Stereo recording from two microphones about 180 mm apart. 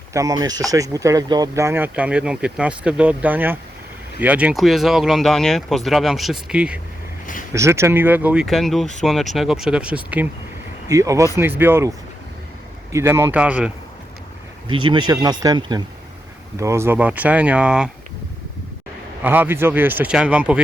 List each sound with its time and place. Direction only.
0.1 s speech: 20° right (ahead or behind)
7.5 s speech: 15° right (ahead or behind)
14.7 s speech: 25° right (ahead or behind); by 17.9 s 5° right (ahead or behind)
19.2 s speech: 10° right (ahead or behind)